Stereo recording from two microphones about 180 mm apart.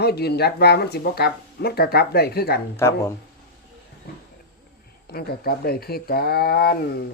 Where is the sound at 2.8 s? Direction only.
15° left (ahead or behind).